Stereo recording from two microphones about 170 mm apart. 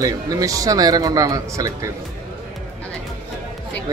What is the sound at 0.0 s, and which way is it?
A man's voice, 20° right (ahead or behind).